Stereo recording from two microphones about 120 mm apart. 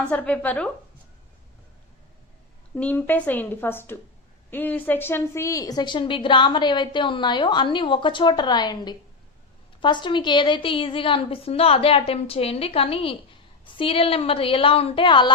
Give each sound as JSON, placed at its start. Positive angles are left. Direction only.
{"t": 0.1, "sound": "a woman's voice", "side_deg": 10}
{"t": 2.7, "sound": "a woman's voice", "side_deg": 15}